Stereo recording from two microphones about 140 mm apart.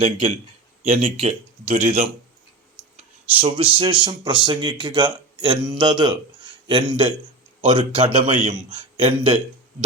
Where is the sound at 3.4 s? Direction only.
40° right (ahead or behind).